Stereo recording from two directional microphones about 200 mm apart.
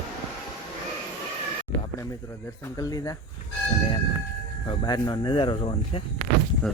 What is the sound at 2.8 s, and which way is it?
Speech, 20° left (ahead or behind).